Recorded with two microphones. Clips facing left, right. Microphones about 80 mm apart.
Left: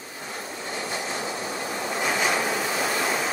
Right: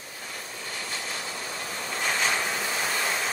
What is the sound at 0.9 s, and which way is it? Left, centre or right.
Vehicle, left.